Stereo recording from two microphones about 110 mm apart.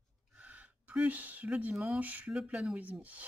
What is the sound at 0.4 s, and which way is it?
Speech, 15° right (ahead or behind).